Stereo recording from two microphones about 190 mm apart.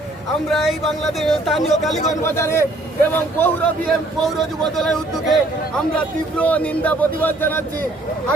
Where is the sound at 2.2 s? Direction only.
15° left (ahead or behind).